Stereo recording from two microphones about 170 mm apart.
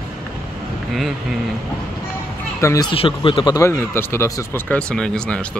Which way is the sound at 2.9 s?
30° left (ahead or behind).